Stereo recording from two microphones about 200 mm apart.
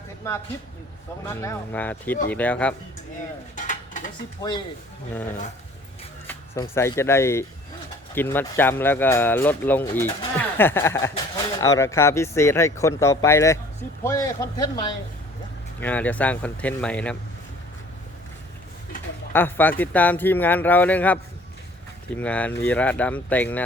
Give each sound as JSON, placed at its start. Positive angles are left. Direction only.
{"t": 0.2, "sound": "speech", "side_deg": 15}
{"t": 3.5, "sound": "dishes", "side_deg": 40}
{"t": 4.4, "sound": "speech", "side_deg": 20}
{"t": 6.2, "sound": "speech", "side_deg": 15}
{"t": 19.3, "sound": "speech", "side_deg": 10}